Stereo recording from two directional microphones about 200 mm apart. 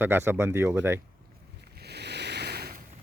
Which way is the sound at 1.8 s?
55° right (ahead or behind).